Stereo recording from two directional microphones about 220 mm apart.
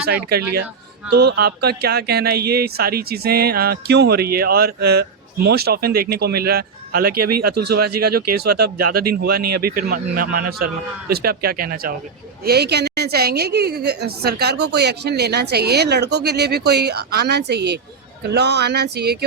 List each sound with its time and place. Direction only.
0.0 s speech: 45° right (ahead or behind)